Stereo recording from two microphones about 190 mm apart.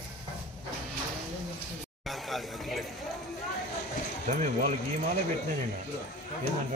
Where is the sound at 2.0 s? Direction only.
Centre (ahead or behind).